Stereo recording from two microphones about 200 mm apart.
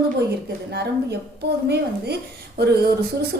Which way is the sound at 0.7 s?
55° right (ahead or behind).